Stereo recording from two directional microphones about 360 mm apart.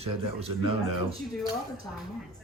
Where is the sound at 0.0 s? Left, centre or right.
Centre.